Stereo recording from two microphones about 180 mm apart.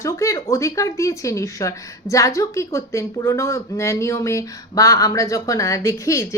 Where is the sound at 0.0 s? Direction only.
15° left (ahead or behind).